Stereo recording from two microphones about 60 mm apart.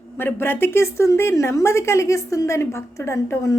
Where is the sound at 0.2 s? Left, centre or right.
Left.